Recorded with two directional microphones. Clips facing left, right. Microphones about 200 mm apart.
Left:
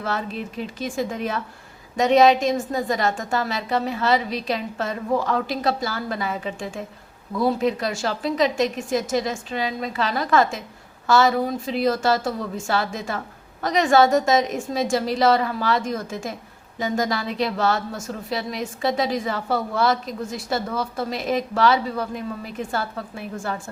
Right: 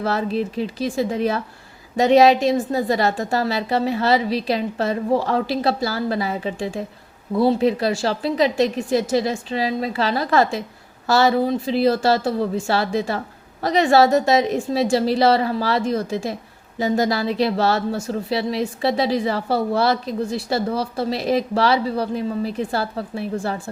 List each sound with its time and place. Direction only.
0.0 s speech: 35° right (ahead or behind)